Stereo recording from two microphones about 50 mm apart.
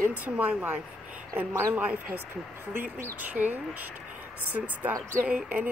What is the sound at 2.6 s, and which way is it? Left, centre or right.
Speech, right.